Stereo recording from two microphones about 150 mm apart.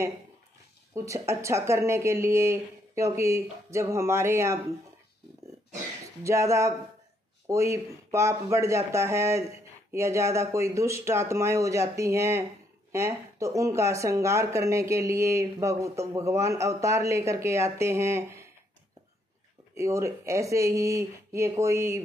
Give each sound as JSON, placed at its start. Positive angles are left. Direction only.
{"t": 0.9, "sound": "speech", "side_deg": -20}
{"t": 6.2, "sound": "speech", "side_deg": -20}
{"t": 19.7, "sound": "speech", "side_deg": -20}